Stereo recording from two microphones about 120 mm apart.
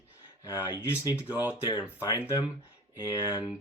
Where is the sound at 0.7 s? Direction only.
15° right (ahead or behind).